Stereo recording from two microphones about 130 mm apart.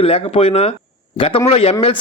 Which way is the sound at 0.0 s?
45° left (ahead or behind).